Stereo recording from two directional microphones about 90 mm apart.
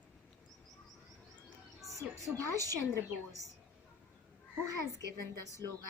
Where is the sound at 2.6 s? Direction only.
40° right (ahead or behind).